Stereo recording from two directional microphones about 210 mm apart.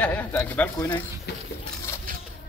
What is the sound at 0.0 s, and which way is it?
Speech, 10° left (ahead or behind).